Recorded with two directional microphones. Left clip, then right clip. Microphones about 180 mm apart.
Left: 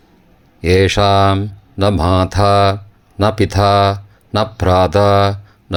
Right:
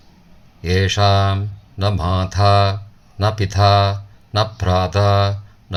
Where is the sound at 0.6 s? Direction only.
45° left (ahead or behind).